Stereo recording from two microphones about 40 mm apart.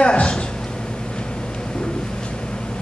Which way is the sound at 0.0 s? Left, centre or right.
Left.